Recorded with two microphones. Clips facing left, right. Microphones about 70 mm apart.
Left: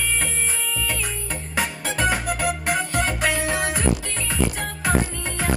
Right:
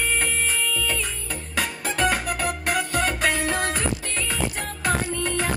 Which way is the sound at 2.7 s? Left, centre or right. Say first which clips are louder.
Right 1 dB; left.